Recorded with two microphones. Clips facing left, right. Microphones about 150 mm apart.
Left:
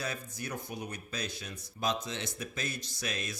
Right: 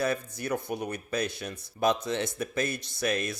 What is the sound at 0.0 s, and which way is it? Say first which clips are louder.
Speech: right 9 dB; 55° right (ahead or behind).